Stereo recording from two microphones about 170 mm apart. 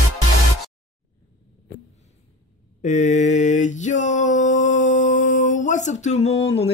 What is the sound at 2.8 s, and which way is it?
Mantra, 45° left (ahead or behind).